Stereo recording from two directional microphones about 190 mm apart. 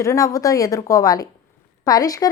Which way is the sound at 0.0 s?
15° left (ahead or behind).